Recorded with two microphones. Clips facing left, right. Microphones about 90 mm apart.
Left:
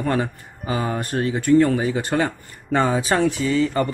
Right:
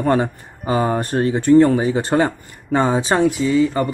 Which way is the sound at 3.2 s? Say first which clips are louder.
Right 4 dB; 15° right (ahead or behind).